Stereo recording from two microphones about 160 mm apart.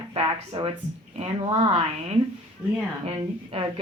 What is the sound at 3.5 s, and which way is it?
Speech, 35° right (ahead or behind).